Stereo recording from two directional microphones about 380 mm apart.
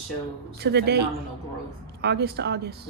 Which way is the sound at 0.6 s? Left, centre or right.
Right.